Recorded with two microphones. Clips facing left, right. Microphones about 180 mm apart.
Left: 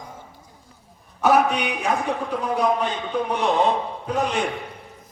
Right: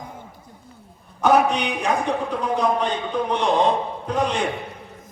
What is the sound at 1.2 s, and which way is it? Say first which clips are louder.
A man's voice: right 1 dB; 5° left (ahead or behind).